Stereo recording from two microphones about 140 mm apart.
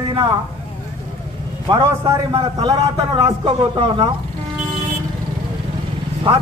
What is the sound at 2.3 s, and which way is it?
A man's voice, 35° right (ahead or behind).